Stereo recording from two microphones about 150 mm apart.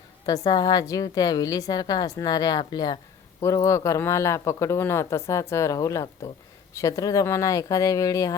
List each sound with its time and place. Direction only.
0.3 s speech: 25° left (ahead or behind)